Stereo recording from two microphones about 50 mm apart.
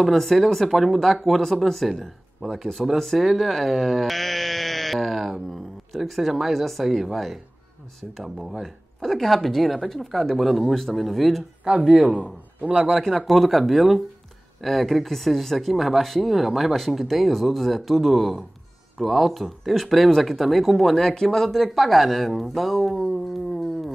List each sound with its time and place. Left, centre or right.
0.0 s a man's voice: centre
12.9 s speech: centre